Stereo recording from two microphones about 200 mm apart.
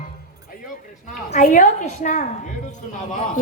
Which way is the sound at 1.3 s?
40° left (ahead or behind).